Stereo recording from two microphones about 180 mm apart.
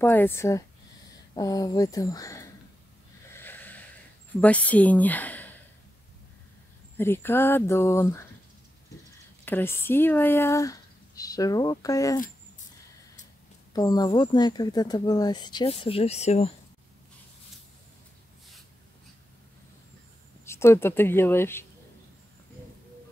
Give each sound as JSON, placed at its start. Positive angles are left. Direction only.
{"t": 0.0, "sound": "speech", "side_deg": 10}
{"t": 3.3, "sound": "a sound", "side_deg": 10}
{"t": 4.4, "sound": "speech", "side_deg": 10}
{"t": 7.0, "sound": "speech", "side_deg": 10}
{"t": 9.4, "sound": "speech", "side_deg": 10}
{"t": 13.7, "sound": "speech", "side_deg": 20}
{"t": 20.4, "sound": "speech", "side_deg": 15}